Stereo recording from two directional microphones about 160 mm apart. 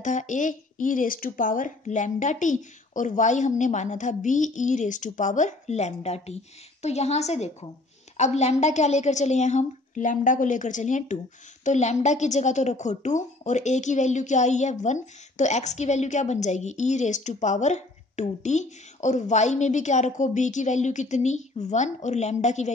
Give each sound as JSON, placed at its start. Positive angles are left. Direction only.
{"t": 0.0, "sound": "a woman's voice", "side_deg": 50}